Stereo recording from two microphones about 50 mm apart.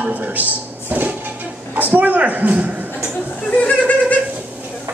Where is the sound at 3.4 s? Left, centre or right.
Left.